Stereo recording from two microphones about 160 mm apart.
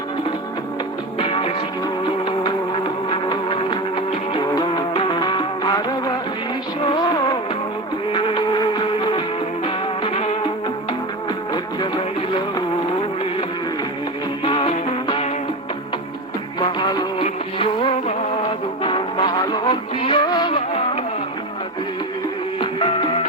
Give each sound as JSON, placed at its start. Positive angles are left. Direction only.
{"t": 1.2, "sound": "music", "side_deg": 40}
{"t": 3.1, "sound": "music", "side_deg": 30}
{"t": 6.9, "sound": "music of bollywood", "side_deg": 25}
{"t": 8.1, "sound": "music", "side_deg": 30}
{"t": 14.4, "sound": "music", "side_deg": 35}
{"t": 16.6, "sound": "music", "side_deg": 30}